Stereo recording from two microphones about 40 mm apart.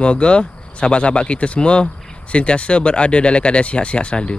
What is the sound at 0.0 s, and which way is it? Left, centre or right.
Speech, left.